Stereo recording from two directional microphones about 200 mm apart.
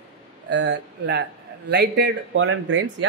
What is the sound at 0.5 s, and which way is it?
Speech, 60° right (ahead or behind).